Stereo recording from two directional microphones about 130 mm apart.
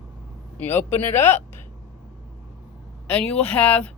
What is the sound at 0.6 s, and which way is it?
Speech, 15° left (ahead or behind).